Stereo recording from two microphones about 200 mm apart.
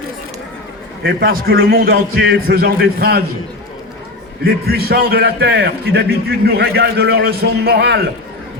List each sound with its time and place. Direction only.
1.0 s a man's voice: 45° right (ahead or behind)
4.4 s a man's voice: 50° right (ahead or behind)